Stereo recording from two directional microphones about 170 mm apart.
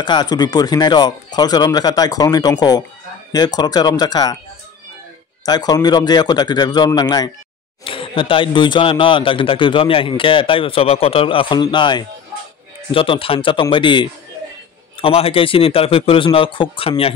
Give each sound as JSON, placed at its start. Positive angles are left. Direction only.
{"t": 0.0, "sound": "speech", "side_deg": 25}
{"t": 5.4, "sound": "speech", "side_deg": 25}